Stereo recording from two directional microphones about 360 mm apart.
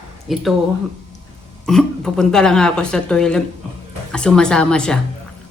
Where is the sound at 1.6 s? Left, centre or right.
Centre.